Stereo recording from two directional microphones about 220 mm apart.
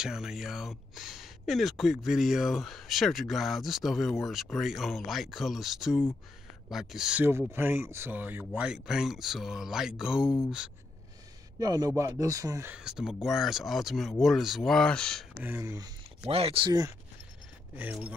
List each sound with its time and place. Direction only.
0.0 s speech: centre (ahead or behind)
11.6 s speech: 15° right (ahead or behind); by 15.2 s 5° left (ahead or behind)
15.4 s speech: 10° right (ahead or behind)
16.3 s speech: 25° right (ahead or behind)
17.7 s speech: 5° right (ahead or behind)